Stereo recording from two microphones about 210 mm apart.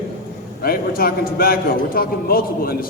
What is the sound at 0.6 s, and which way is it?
A man's voice, 45° left (ahead or behind).